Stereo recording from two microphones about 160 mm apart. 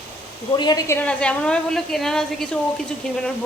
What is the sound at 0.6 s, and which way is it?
A woman's voice, 25° left (ahead or behind).